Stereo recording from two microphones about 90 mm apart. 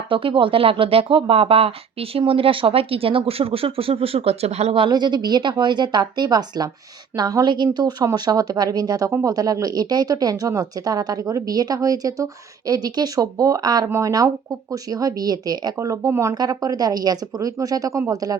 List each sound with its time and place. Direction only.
0.1 s speech: 75° right (ahead or behind); by 4.9 s 90° right
4.9 s a woman's voice: 55° right (ahead or behind)
7.2 s speech: 40° right (ahead or behind)
7.4 s speech: 55° right (ahead or behind)
9.0 s speech: 35° right (ahead or behind)
13.8 s speech: 35° right (ahead or behind)
16.3 s speech: 45° right (ahead or behind)